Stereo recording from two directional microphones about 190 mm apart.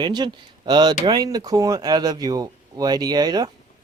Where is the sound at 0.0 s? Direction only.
25° right (ahead or behind).